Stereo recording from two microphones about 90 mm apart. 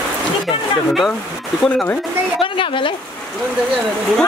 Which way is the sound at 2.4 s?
75° left (ahead or behind).